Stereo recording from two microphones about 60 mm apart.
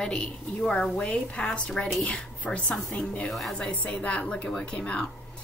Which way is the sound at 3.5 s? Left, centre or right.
Left.